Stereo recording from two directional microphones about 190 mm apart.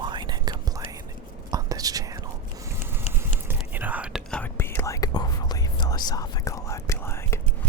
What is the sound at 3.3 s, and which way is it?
Whispering, 10° right (ahead or behind).